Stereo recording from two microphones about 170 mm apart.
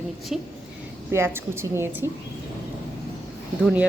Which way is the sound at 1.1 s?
15° right (ahead or behind).